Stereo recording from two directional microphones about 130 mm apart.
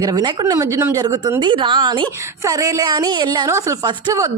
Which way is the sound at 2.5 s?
25° right (ahead or behind).